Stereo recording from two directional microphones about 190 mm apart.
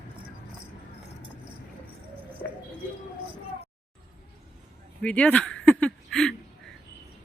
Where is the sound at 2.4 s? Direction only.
50° left (ahead or behind).